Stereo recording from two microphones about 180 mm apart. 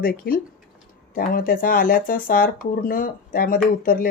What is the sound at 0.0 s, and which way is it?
Speech, 55° left (ahead or behind).